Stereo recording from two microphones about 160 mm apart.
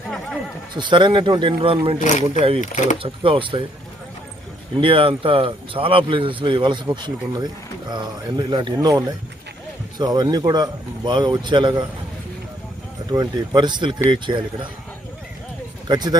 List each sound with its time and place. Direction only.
0.7 s speech: 30° right (ahead or behind)
2.0 s speech: 50° left (ahead or behind)
3.0 s speech: 35° right (ahead or behind)
4.8 s speech: 35° right (ahead or behind)
13.1 s speech: 25° right (ahead or behind)
15.9 s speech: 25° right (ahead or behind)